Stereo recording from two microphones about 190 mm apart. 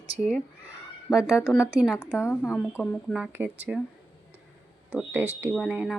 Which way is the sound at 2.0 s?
10° left (ahead or behind).